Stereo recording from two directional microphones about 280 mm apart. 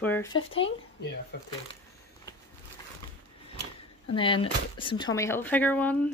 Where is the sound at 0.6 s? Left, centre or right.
Left.